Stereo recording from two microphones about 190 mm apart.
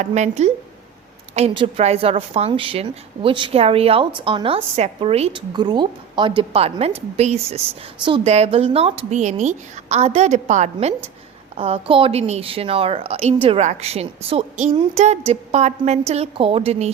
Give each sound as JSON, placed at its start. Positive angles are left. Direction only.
{"t": 0.0, "sound": "a woman's voice", "side_deg": -35}